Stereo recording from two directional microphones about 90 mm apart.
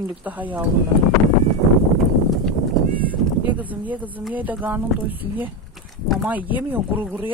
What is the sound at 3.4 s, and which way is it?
Speech, 20° right (ahead or behind).